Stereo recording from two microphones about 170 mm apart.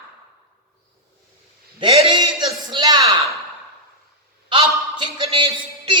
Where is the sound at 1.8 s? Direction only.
30° right (ahead or behind).